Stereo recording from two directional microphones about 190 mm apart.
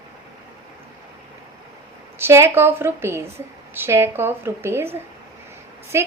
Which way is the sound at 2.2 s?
15° right (ahead or behind).